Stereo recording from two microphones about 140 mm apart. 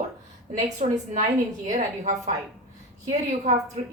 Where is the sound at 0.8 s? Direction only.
60° right (ahead or behind).